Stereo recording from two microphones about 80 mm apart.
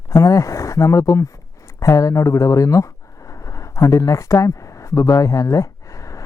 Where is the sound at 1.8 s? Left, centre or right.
Left.